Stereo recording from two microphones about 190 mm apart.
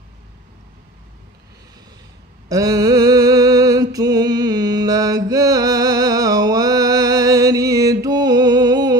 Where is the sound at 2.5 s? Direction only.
15° right (ahead or behind).